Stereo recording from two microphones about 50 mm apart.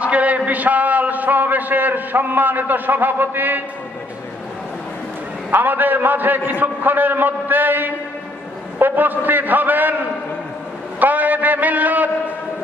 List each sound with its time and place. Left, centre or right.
0.0 s a sound: right
0.5 s a man's voice: right
5.5 s a man's voice: right
11.0 s a man's voice: right